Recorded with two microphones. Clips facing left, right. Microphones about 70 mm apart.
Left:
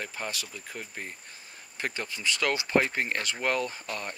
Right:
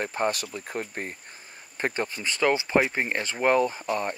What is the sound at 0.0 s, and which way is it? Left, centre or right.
Speech, right.